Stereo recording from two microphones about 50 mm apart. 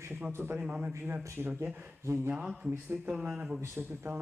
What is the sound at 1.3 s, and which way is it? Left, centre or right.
Speech, right.